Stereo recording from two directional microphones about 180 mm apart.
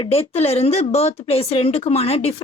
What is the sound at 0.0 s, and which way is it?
Speech, 35° left (ahead or behind).